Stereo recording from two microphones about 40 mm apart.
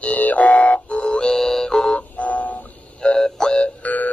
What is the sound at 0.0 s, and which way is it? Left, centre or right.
Music, left.